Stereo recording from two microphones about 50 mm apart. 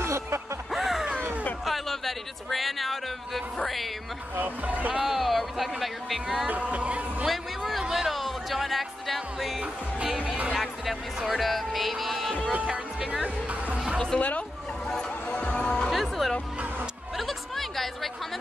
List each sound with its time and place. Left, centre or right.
0.0 s music: right
0.7 s a sound: centre
4.4 s speech: right
5.0 s speech: centre
6.4 s speech: right
7.2 s a sound: centre
7.9 s music: centre
9.6 s music: centre
10.6 s music: centre
13.1 s music: centre
14.1 s speech: left
15.3 s music: left
15.9 s music: centre
17.2 s chatter: centre